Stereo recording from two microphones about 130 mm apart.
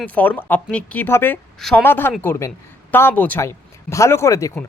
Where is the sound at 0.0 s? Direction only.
10° left (ahead or behind).